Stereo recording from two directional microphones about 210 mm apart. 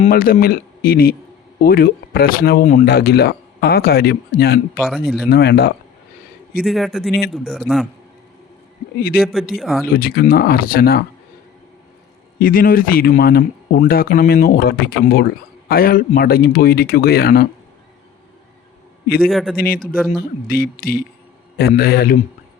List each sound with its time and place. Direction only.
0.1 s speech: 45° left (ahead or behind)
4.8 s a man's voice: centre (ahead or behind)
5.3 s speech: 50° left (ahead or behind)
6.7 s a man's voice: centre (ahead or behind)
9.2 s a man's voice: 5° right (ahead or behind)
9.8 s speech: 45° left (ahead or behind)
12.4 s speech: 40° left (ahead or behind)
19.3 s a man's voice: centre (ahead or behind)
19.5 s speech: 45° left (ahead or behind)